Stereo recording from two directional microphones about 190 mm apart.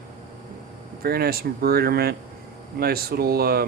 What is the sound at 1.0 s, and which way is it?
Speech, 55° right (ahead or behind).